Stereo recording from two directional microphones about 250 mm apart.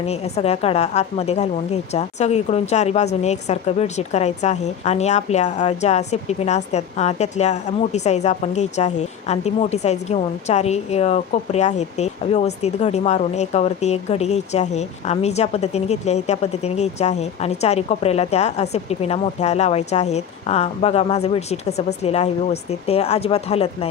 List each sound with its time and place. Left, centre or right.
0.0 s a woman's voice: left